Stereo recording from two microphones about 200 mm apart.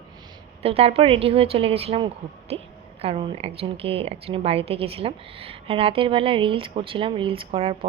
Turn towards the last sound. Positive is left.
turn(degrees=-30)  # may be behind; listen again after turning